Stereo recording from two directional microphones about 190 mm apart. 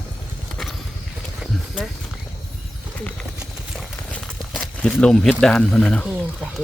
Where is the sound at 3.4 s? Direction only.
Centre (ahead or behind).